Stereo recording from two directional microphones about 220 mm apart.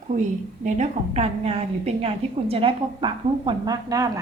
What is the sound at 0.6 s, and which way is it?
A woman's voice, 30° right (ahead or behind).